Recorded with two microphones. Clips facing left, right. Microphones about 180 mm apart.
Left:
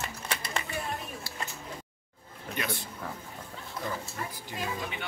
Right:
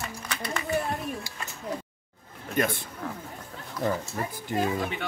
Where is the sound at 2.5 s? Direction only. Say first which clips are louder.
Right 8 dB; 50° right (ahead or behind).